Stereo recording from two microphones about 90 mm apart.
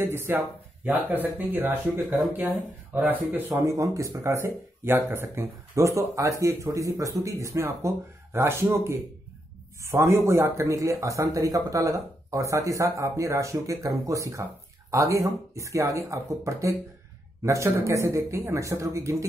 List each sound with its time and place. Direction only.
0.0 s speech: 25° right (ahead or behind)
3.6 s speech: 35° right (ahead or behind)